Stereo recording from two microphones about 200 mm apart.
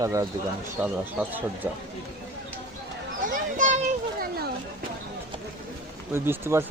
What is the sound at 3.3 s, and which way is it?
Children playing, 40° right (ahead or behind).